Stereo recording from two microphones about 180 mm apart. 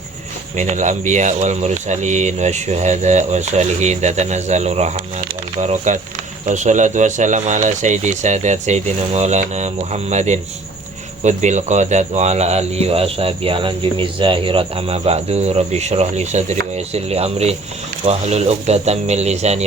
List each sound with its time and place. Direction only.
0.5 s speech: 45° right (ahead or behind)